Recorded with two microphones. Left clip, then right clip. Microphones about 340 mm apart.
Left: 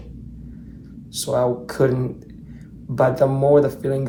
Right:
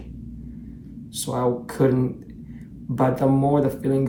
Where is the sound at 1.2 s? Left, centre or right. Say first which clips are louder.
Left 4 dB; centre.